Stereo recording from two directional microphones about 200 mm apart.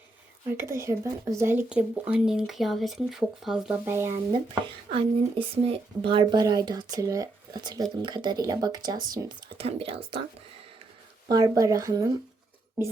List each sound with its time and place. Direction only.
0.5 s speech: 15° right (ahead or behind)
4.9 s speech: 25° right (ahead or behind)
11.3 s speech: 20° right (ahead or behind)